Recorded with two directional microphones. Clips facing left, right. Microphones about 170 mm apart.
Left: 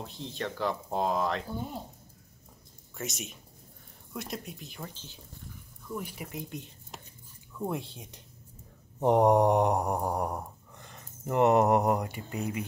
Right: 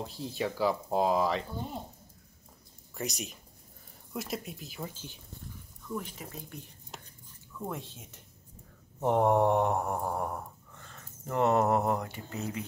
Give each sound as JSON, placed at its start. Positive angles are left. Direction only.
{"t": 0.0, "sound": "speech", "side_deg": -5}
{"t": 3.0, "sound": "speech", "side_deg": 0}
{"t": 5.9, "sound": "speech", "side_deg": 10}
{"t": 6.9, "sound": "a sound", "side_deg": 0}
{"t": 7.5, "sound": "speech", "side_deg": 15}
{"t": 9.0, "sound": "mantra", "side_deg": 15}